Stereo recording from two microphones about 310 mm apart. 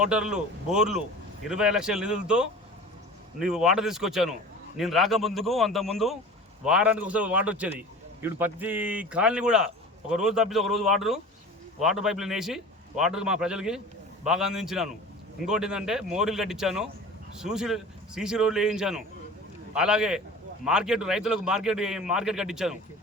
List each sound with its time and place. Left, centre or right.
0.0 s a man's voice: centre